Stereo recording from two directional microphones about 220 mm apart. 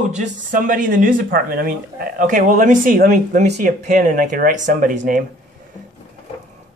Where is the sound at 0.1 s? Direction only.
35° right (ahead or behind).